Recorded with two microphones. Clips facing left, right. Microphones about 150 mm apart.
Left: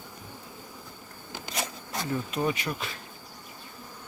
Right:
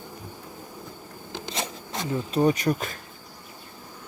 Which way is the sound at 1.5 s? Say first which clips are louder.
Right 1 dB; 25° right (ahead or behind).